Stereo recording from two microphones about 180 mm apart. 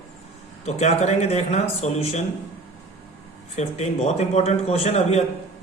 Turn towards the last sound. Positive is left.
turn(degrees=35)  # may be behind; listen again after turning